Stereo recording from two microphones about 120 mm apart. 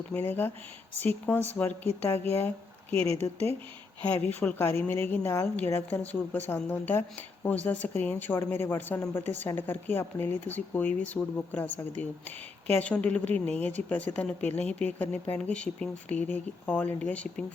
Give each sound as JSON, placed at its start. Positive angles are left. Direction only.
{"t": 0.1, "sound": "a woman's voice", "side_deg": 15}
{"t": 2.9, "sound": "speech", "side_deg": -50}
{"t": 4.1, "sound": "a woman's voice", "side_deg": 15}